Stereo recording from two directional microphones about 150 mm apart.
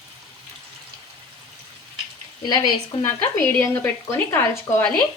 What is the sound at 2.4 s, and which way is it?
Speech, 30° left (ahead or behind).